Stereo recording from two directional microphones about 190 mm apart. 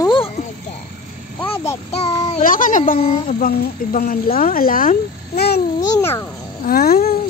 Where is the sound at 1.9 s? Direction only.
20° left (ahead or behind).